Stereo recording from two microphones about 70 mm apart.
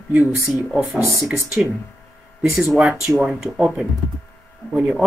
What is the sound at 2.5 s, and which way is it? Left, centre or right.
Speech, centre.